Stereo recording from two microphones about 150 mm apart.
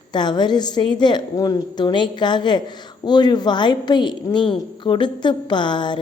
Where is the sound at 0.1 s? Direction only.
30° left (ahead or behind).